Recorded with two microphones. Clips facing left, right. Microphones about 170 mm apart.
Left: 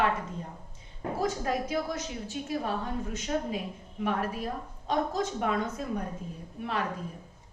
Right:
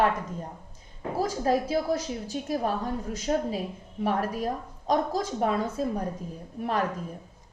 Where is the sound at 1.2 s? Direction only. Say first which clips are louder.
Right 5 dB; 35° right (ahead or behind).